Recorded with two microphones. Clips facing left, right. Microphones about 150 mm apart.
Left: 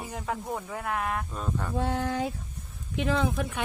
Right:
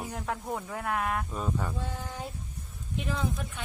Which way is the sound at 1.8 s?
75° left (ahead or behind).